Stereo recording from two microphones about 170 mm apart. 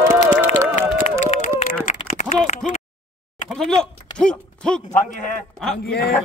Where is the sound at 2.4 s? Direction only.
45° left (ahead or behind).